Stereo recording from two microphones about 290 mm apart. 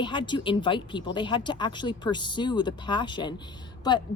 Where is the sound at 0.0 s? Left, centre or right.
Centre.